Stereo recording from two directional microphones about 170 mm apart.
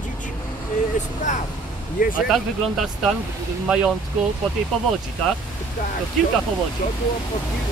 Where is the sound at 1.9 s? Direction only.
55° left (ahead or behind).